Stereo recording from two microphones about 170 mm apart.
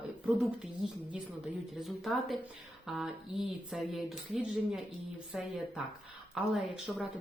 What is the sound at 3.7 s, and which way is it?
Speech, centre (ahead or behind).